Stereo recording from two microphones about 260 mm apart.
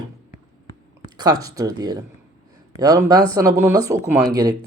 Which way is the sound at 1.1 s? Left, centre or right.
Centre.